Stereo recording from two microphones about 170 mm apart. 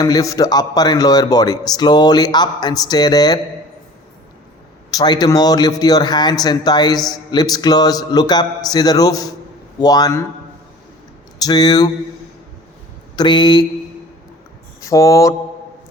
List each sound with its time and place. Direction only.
0.0 s speech: 20° left (ahead or behind)
4.9 s speech: 25° left (ahead or behind)
11.3 s speech: 25° left (ahead or behind)
13.1 s speech: 25° left (ahead or behind)
14.8 s speech: 20° left (ahead or behind)